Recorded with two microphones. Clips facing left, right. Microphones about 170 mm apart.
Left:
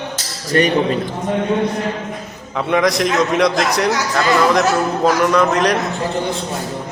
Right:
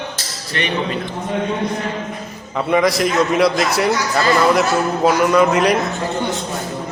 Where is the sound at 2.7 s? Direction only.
Centre (ahead or behind).